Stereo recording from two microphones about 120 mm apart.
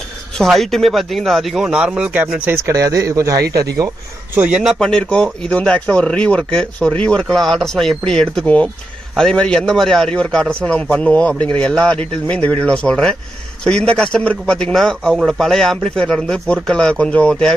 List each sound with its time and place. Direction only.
0.4 s speech: centre (ahead or behind); by 3.9 s 30° right (ahead or behind)
4.4 s speech: 10° right (ahead or behind)
4.7 s speech: 5° left (ahead or behind)